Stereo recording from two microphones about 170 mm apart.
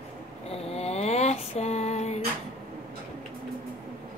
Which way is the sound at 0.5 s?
35° left (ahead or behind).